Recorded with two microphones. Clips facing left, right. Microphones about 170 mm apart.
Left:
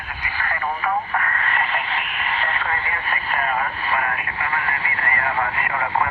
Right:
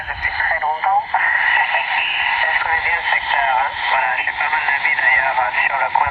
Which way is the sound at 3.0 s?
25° right (ahead or behind).